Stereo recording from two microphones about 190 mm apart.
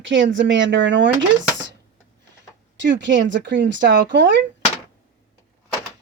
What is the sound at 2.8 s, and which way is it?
Speech, 70° right (ahead or behind).